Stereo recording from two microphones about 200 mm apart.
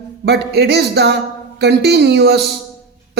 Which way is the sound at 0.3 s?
55° right (ahead or behind).